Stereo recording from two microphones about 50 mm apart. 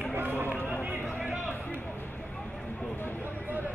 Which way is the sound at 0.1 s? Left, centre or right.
Right.